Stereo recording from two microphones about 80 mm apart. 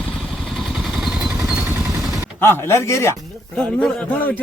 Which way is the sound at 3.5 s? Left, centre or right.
Centre.